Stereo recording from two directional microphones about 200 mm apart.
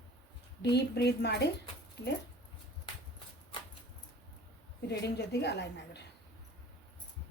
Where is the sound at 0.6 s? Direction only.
55° left (ahead or behind).